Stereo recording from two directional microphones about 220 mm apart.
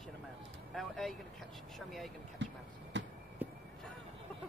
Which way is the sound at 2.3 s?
55° right (ahead or behind).